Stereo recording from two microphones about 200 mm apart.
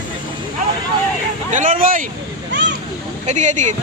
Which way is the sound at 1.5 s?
40° right (ahead or behind).